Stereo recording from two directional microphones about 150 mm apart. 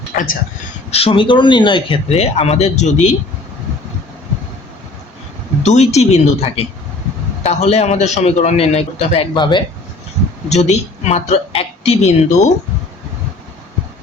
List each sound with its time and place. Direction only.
0.1 s a man's voice: 75° left (ahead or behind)
0.9 s speech: 40° left (ahead or behind)
2.0 s a man's voice: 45° left (ahead or behind)
5.6 s a man's voice: 50° left (ahead or behind); by 9.6 s 30° left (ahead or behind)
10.5 s a man's voice: 50° left (ahead or behind)